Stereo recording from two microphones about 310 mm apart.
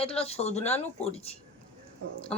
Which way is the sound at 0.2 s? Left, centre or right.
Centre.